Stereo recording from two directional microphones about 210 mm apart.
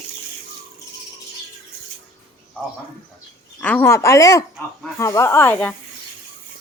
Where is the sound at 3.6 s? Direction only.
10° left (ahead or behind).